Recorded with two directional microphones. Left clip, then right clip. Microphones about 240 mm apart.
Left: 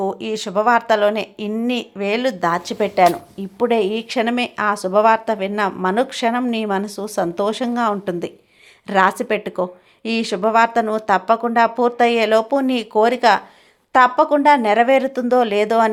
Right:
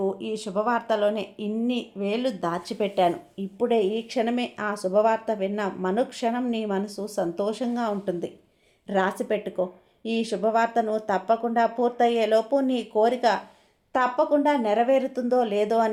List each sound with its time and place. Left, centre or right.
0.0 s speech: centre